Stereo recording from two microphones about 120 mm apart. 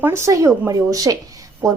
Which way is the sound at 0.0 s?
20° right (ahead or behind).